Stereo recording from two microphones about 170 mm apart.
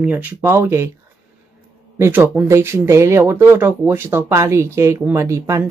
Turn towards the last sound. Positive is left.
turn(degrees=-15)  # may be behind; listen again after turning